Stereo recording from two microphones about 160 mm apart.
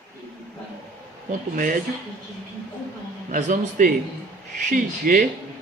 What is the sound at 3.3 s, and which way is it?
A man's voice, 55° right (ahead or behind).